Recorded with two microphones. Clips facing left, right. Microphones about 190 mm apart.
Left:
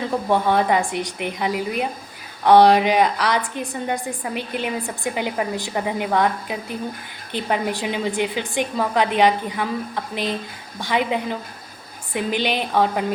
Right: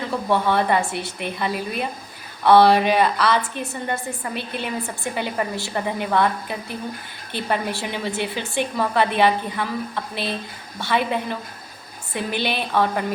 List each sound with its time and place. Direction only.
0.3 s a woman's voice: 15° left (ahead or behind)